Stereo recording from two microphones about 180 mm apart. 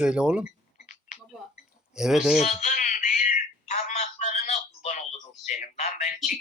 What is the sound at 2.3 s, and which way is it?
Telephone, 40° left (ahead or behind).